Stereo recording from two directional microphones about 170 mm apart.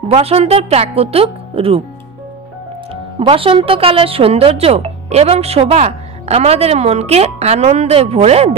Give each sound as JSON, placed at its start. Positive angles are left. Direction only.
{"t": 0.1, "sound": "speech", "side_deg": -35}
{"t": 2.9, "sound": "speech", "side_deg": -35}